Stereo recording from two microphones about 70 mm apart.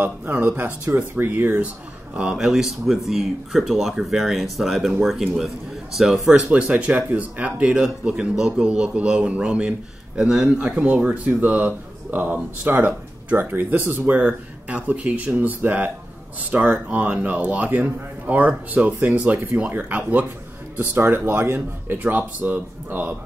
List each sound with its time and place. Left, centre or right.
0.0 s speech: right
2.1 s a man's voice: centre
6.5 s a man's voice: centre
10.9 s speech: right
18.9 s speech: right